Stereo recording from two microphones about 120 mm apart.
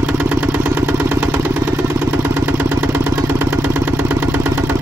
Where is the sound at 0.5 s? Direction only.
20° right (ahead or behind).